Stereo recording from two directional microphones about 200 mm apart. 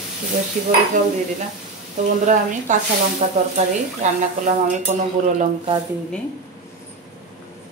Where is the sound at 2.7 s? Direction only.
40° right (ahead or behind).